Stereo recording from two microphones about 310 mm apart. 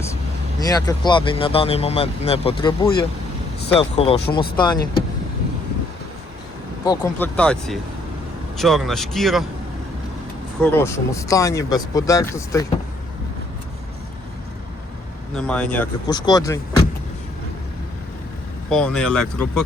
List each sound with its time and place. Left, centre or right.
0.6 s speech: centre
6.8 s speech: centre
10.6 s speech: centre
15.4 s speech: centre
18.7 s speech: centre